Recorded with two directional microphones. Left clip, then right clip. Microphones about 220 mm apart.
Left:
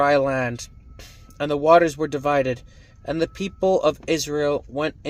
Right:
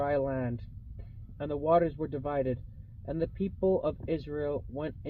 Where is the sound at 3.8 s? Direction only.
15° left (ahead or behind).